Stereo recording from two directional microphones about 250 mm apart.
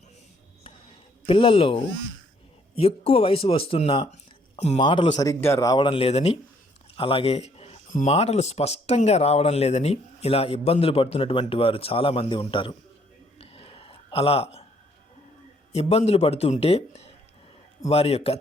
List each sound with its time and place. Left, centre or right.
1.3 s speech: left
13.4 s a sound: left
15.7 s speech: left